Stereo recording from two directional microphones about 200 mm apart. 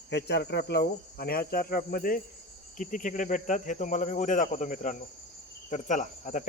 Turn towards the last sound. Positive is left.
turn(degrees=40)  # may be behind; listen again after turning